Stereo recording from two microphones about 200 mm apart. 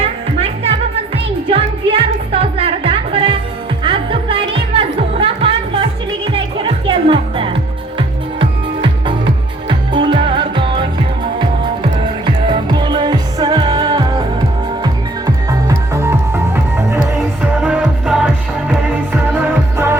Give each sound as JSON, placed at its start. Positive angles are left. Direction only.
{"t": 0.0, "sound": "music", "side_deg": -30}
{"t": 15.4, "sound": "music", "side_deg": -15}
{"t": 19.3, "sound": "music", "side_deg": -15}